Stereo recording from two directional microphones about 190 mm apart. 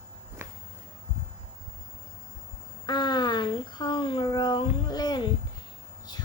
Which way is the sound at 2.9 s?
25° left (ahead or behind).